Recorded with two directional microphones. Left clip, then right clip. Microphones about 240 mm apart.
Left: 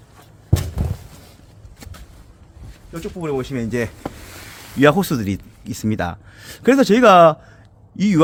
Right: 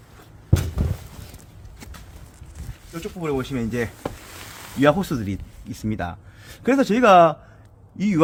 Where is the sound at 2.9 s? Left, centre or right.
Left.